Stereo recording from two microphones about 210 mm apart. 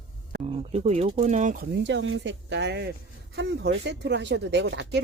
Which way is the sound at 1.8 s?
60° right (ahead or behind).